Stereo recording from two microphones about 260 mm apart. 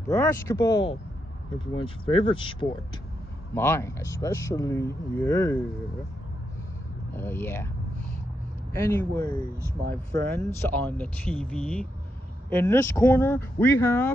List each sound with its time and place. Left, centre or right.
0.1 s speech: centre
7.2 s speech: centre
8.7 s speech: centre